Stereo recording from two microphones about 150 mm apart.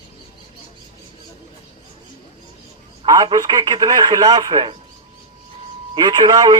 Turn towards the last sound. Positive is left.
turn(degrees=-25)  # may be behind; listen again after turning